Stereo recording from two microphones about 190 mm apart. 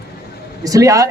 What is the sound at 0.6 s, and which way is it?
Speech, 15° right (ahead or behind).